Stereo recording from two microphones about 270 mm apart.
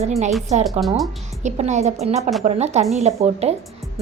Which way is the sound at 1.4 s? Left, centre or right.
Right.